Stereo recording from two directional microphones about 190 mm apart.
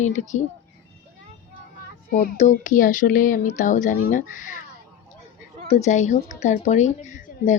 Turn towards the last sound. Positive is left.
turn(degrees=40)  # may be behind; listen again after turning